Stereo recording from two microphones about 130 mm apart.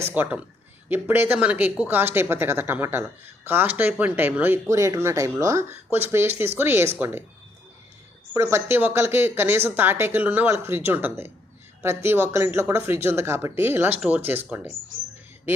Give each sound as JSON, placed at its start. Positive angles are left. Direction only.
{"t": 0.0, "sound": "a woman's voice", "side_deg": -15}
{"t": 8.3, "sound": "a woman's voice", "side_deg": -20}